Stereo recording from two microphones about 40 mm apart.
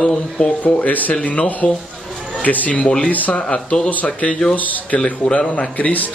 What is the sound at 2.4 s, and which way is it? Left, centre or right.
Speech, left.